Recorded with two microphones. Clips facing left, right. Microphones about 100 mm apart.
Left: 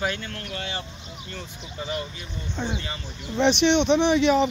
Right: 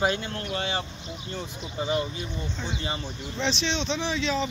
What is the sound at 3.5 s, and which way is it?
Speech, 65° left (ahead or behind).